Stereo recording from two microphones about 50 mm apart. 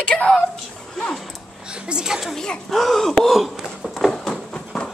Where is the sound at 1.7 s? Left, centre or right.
Centre.